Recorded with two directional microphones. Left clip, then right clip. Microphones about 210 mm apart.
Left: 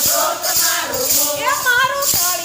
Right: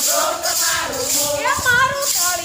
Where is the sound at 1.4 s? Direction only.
5° left (ahead or behind).